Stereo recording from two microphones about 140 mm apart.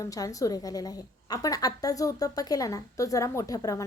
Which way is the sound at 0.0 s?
25° left (ahead or behind).